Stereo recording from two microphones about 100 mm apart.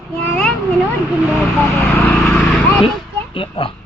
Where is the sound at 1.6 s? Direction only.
Centre (ahead or behind).